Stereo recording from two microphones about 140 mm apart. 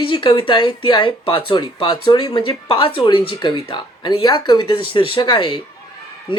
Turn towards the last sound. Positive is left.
turn(degrees=35)  # may be behind; listen again after turning